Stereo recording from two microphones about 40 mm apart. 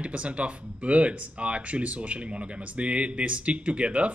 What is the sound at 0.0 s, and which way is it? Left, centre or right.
Speech, right.